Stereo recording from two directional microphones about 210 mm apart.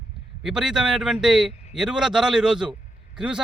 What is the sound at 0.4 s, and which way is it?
Speech, centre (ahead or behind).